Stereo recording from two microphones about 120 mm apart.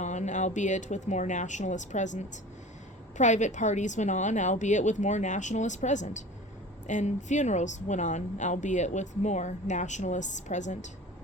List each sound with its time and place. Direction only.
0.0 s a woman's voice: 80° left